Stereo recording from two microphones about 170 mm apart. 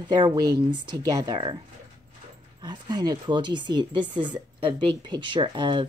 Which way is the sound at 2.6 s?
25° right (ahead or behind).